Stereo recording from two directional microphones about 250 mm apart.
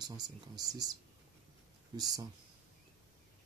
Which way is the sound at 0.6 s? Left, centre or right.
Centre.